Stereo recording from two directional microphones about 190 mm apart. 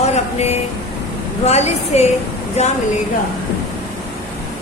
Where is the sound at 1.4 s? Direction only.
35° left (ahead or behind).